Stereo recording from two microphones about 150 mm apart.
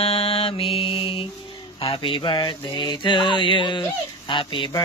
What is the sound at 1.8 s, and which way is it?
Child singing, 35° left (ahead or behind).